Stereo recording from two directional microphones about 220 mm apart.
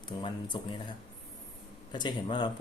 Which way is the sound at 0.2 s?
20° left (ahead or behind).